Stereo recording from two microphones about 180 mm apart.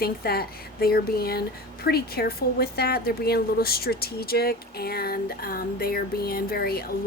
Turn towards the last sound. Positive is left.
turn(degrees=55)  # may be behind; listen again after turning